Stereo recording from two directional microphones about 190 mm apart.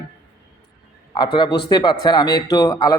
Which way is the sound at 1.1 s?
25° left (ahead or behind).